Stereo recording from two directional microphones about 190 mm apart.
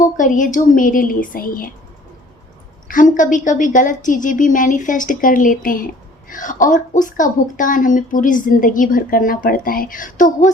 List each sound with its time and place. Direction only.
0.0 s a woman's voice: 45° left (ahead or behind)
2.8 s a woman's voice: 45° left (ahead or behind)